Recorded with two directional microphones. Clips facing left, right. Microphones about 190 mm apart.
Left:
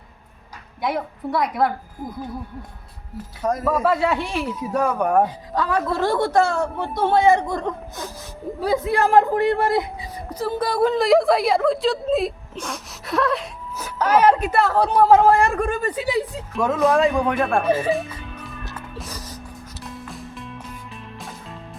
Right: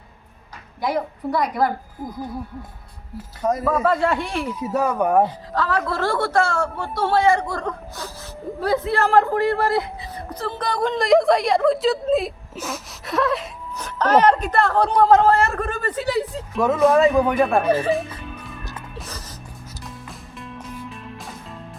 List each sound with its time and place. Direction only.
0.8 s speech: centre (ahead or behind)
3.4 s speech: centre (ahead or behind)
5.2 s a woman's voice: 15° left (ahead or behind)
16.6 s speech: 5° right (ahead or behind)
19.8 s music: centre (ahead or behind)